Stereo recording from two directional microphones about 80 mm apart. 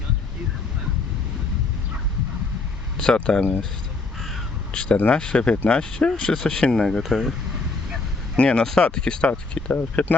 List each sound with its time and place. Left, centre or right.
3.0 s speech: centre
4.7 s speech: centre
8.4 s speech: centre